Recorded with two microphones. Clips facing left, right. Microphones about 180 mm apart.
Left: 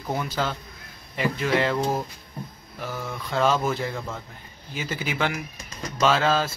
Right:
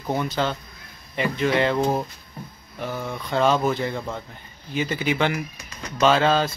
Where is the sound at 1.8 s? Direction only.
25° right (ahead or behind).